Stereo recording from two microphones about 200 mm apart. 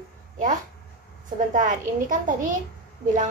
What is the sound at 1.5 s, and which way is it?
A woman's voice, 40° right (ahead or behind).